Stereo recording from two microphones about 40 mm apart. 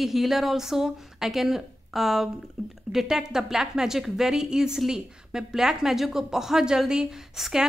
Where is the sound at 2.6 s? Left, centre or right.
Centre.